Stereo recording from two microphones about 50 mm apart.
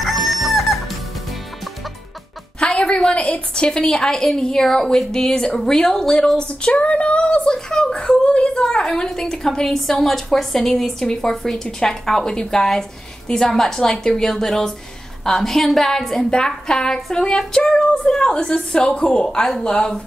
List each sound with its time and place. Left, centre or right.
0.0 s chicken: centre
2.6 s a woman's voice: centre